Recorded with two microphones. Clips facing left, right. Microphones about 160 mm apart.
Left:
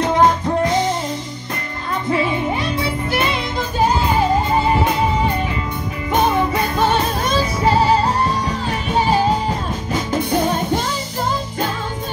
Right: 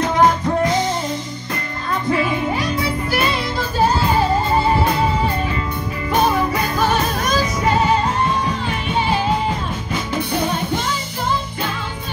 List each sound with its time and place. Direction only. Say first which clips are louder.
0.0 s music: left 1 dB; 25° left (ahead or behind)
2.2 s music: even; 25° left (ahead or behind)
6.2 s music: left 2 dB; 25° left (ahead or behind); by 10.8 s 40° left (ahead or behind)